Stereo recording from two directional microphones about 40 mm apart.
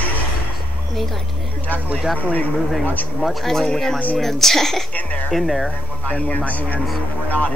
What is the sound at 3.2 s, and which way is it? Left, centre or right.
Speech, centre.